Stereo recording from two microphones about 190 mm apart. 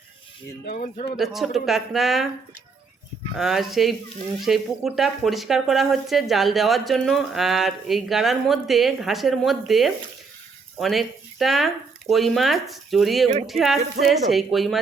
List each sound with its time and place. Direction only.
0.6 s speech: 45° left (ahead or behind)
1.1 s speech: centre (ahead or behind)
3.3 s speech: centre (ahead or behind)